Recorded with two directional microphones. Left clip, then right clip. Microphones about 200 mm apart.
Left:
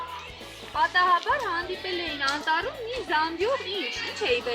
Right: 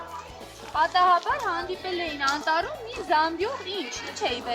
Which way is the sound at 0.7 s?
40° right (ahead or behind).